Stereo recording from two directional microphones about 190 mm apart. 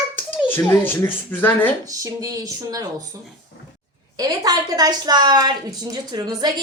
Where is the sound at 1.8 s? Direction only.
20° right (ahead or behind).